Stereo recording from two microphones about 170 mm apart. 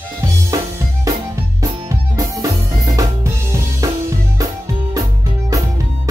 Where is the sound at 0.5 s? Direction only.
20° right (ahead or behind).